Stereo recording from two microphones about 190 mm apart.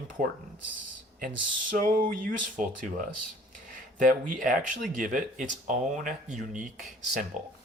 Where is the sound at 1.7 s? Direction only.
45° right (ahead or behind).